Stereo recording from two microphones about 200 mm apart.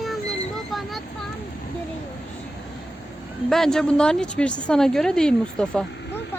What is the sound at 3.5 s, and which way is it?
A woman's voice, centre (ahead or behind).